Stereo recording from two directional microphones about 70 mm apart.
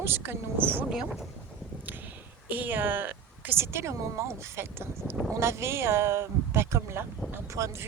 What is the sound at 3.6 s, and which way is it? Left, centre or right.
Speech, right.